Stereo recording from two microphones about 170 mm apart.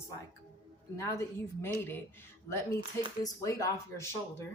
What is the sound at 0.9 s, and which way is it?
Speech, 20° left (ahead or behind).